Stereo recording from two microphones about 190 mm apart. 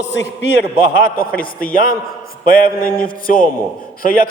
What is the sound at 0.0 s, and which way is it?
Speech, 70° left (ahead or behind).